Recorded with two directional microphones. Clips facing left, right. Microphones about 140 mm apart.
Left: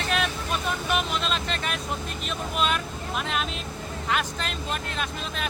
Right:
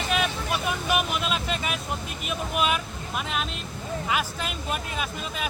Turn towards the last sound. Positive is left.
turn(degrees=-5)  # may be behind; listen again after turning